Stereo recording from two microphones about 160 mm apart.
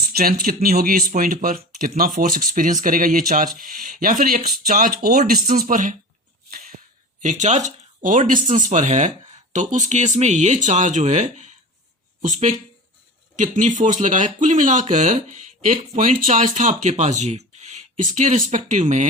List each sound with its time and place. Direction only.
0.1 s speech: 65° right (ahead or behind)
7.2 s speech: 50° right (ahead or behind)